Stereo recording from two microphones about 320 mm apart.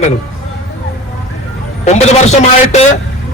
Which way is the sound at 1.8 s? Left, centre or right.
Left.